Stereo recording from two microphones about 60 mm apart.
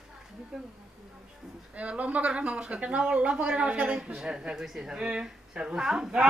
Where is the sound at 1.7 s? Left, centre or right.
Right.